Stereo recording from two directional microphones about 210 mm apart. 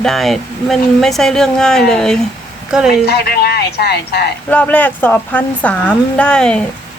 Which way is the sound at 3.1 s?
50° left (ahead or behind).